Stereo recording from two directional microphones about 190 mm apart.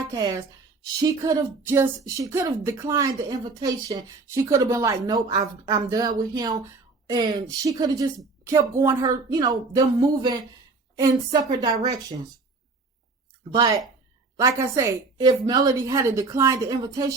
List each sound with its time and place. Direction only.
0.1 s a woman's voice: 20° right (ahead or behind)
10.9 s a woman's voice: 20° right (ahead or behind)
13.5 s a woman's voice: 20° right (ahead or behind)